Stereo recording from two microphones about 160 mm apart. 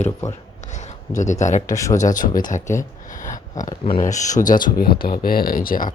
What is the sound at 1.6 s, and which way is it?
Speech, 20° left (ahead or behind).